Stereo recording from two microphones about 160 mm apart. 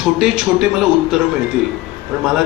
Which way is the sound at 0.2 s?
5° right (ahead or behind).